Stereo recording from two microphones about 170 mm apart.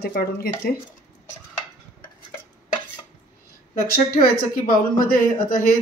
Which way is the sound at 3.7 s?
60° left (ahead or behind).